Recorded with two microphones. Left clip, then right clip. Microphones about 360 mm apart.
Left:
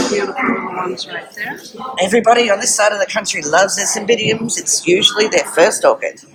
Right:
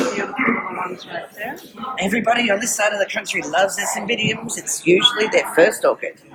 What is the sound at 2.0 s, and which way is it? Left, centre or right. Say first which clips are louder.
A man's voice: left 7 dB; centre.